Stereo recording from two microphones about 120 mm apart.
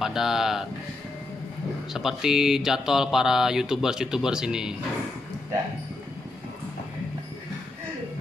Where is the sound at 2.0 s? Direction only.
5° right (ahead or behind).